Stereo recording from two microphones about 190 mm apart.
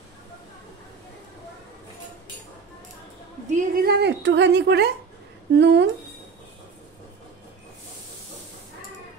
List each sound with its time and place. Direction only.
3.4 s a woman's voice: 50° right (ahead or behind)